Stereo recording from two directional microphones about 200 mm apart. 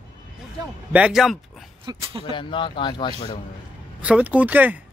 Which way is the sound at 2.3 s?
25° left (ahead or behind).